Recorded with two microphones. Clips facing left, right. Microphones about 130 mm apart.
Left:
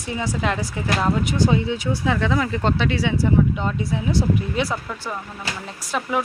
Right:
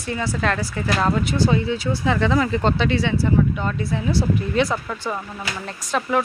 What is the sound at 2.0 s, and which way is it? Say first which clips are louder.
Speech: right 2 dB; centre (ahead or behind).